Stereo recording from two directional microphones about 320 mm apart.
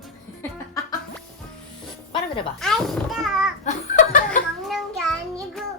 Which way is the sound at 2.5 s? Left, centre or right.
Centre.